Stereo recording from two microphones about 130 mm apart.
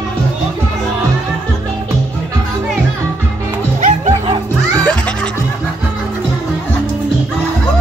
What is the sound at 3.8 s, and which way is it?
Music, 55° right (ahead or behind).